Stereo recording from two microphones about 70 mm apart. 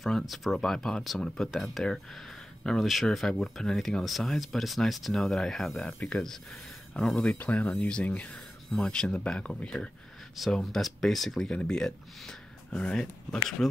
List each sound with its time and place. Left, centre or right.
0.0 s speech: centre